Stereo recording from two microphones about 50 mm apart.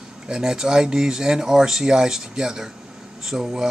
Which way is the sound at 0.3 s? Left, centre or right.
Centre.